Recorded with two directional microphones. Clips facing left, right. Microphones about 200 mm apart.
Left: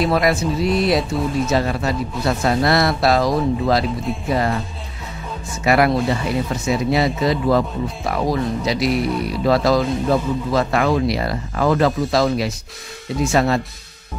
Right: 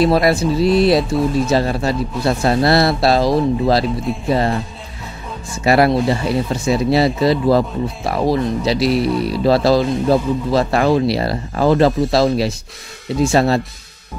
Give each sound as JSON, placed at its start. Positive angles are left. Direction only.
{"t": 0.0, "sound": "speech", "side_deg": -35}
{"t": 5.6, "sound": "speech", "side_deg": -30}